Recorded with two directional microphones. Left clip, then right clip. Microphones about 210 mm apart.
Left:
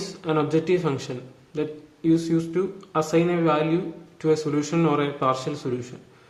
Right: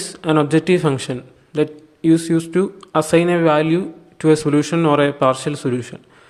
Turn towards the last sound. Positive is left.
turn(degrees=-40)  # may be behind; listen again after turning